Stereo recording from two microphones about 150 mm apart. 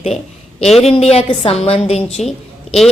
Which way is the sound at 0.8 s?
45° left (ahead or behind).